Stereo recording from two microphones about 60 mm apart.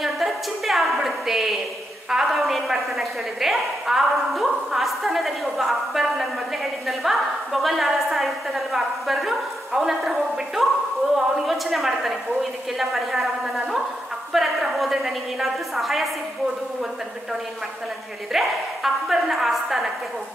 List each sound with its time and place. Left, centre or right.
0.0 s a sound: centre
2.0 s a woman's voice: centre
18.3 s a woman's voice: centre